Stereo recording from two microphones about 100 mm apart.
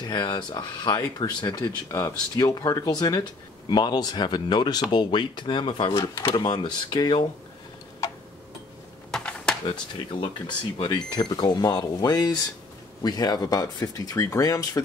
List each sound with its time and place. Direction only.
0.1 s speech: 45° left (ahead or behind)
1.9 s speech: 25° left (ahead or behind)
2.3 s speech: 40° left (ahead or behind)
9.1 s a sound: 10° left (ahead or behind)
10.2 s speech: 50° left (ahead or behind)